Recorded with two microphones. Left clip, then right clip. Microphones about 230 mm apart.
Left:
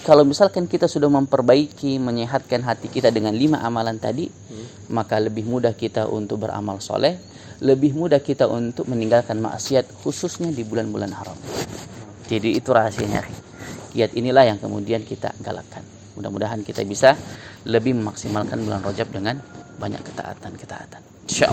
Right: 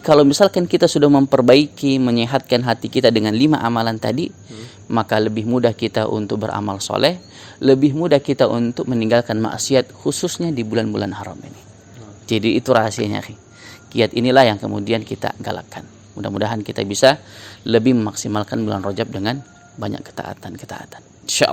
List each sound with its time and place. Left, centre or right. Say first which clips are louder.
0.0 s speech: right 1 dB; right
12.3 s speech: right 3 dB; right